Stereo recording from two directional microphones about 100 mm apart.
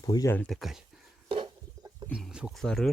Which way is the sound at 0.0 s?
35° left (ahead or behind).